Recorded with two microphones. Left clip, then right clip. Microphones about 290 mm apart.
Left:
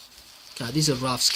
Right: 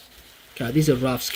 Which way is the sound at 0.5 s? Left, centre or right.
Left.